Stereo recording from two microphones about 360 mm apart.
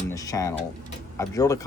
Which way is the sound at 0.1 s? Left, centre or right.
Centre.